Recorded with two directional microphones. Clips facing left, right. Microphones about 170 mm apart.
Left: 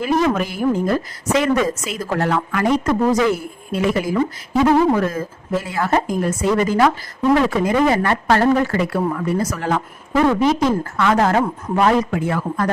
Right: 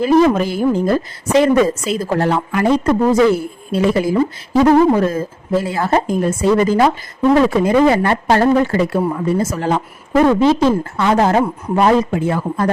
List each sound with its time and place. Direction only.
0.0 s a woman's voice: 30° right (ahead or behind)